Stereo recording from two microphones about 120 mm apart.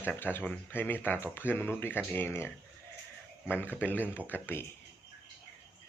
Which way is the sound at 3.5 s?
15° left (ahead or behind).